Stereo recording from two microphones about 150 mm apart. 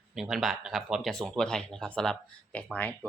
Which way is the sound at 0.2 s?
Centre (ahead or behind).